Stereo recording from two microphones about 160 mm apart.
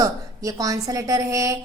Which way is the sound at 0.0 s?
20° right (ahead or behind).